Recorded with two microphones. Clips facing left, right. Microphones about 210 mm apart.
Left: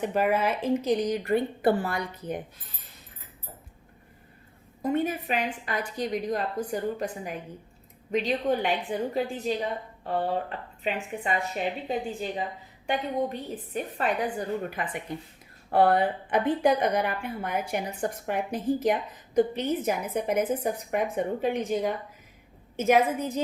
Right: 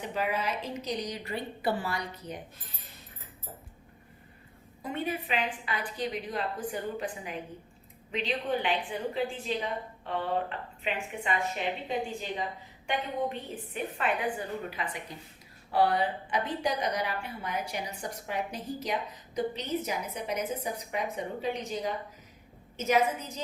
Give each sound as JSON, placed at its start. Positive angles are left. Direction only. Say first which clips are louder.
{"t": 0.0, "sound": "a woman's voice", "louder": "left 7 dB", "side_deg": 50}
{"t": 4.8, "sound": "a woman's voice", "louder": "left 7 dB", "side_deg": 45}
{"t": 10.8, "sound": "a woman's voice", "louder": "left 3 dB", "side_deg": 40}